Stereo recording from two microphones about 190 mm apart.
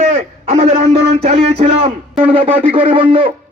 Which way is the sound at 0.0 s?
35° right (ahead or behind).